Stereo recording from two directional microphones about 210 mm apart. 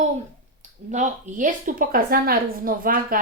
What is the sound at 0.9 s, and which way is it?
A woman's voice, 35° right (ahead or behind).